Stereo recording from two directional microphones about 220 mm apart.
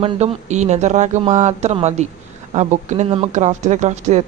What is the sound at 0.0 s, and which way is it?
Speech, 30° right (ahead or behind).